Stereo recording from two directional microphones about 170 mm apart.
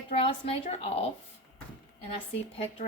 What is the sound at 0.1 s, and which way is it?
A woman's voice, 35° left (ahead or behind).